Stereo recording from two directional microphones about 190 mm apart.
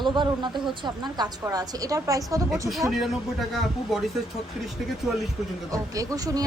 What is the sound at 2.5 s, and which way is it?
Speech, centre (ahead or behind).